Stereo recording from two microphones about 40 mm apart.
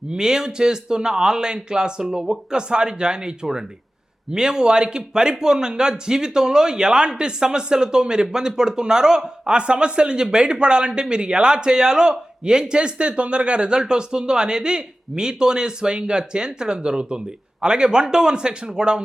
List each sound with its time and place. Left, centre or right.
0.1 s speech: centre
2.5 s a man's voice: right